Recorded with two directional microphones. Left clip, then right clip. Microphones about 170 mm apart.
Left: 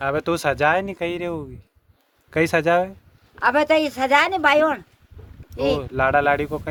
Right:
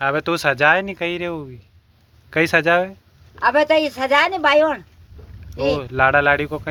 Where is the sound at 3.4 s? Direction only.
30° left (ahead or behind).